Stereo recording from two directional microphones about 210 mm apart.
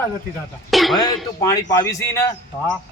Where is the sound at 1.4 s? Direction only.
15° left (ahead or behind).